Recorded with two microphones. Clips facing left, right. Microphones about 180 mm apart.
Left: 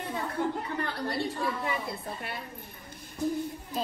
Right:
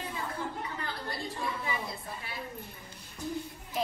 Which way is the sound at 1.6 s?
60° left (ahead or behind).